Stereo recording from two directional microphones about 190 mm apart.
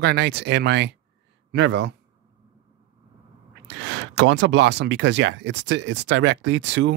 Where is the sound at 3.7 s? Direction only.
70° right (ahead or behind).